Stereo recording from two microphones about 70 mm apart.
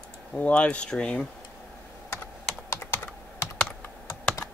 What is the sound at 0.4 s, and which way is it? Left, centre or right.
Speech, centre.